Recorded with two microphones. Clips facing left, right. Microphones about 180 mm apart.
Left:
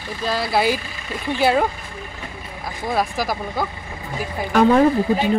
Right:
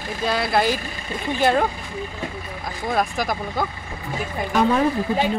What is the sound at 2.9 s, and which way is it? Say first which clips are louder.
Speech: left 1 dB; 5° left (ahead or behind).